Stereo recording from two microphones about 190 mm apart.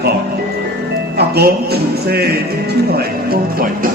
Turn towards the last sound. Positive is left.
turn(degrees=-55)  # may be behind; listen again after turning